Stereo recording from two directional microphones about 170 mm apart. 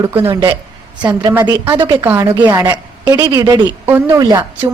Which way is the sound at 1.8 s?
30° right (ahead or behind).